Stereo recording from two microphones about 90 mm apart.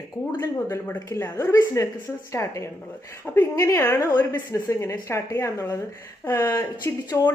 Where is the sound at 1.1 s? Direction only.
30° left (ahead or behind).